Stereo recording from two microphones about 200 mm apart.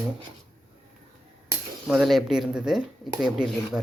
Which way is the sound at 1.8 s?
Centre (ahead or behind).